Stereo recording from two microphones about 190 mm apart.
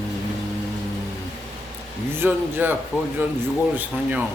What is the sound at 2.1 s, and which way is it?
Speech, 10° right (ahead or behind).